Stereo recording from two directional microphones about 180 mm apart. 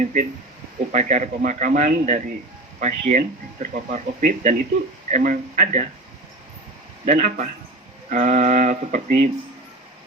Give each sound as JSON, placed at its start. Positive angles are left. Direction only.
{"t": 0.0, "sound": "speech", "side_deg": -45}
{"t": 7.0, "sound": "speech", "side_deg": -40}